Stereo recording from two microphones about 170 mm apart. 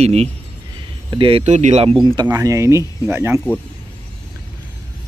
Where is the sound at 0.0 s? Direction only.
40° right (ahead or behind).